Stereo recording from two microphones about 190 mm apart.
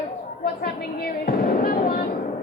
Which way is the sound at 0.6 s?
55° left (ahead or behind).